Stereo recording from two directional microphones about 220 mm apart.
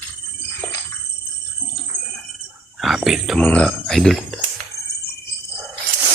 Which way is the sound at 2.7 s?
Centre (ahead or behind).